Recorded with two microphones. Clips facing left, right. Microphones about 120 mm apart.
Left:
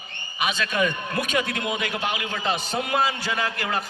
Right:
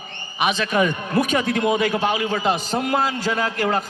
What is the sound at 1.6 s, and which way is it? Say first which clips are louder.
A man's voice: right 8 dB; 40° right (ahead or behind).